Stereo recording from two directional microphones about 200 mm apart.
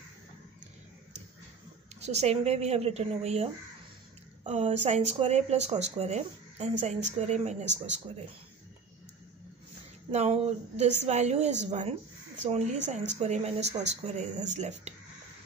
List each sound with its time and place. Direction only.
2.0 s speech: 30° right (ahead or behind)
4.5 s speech: 35° right (ahead or behind)
10.1 s speech: 30° right (ahead or behind)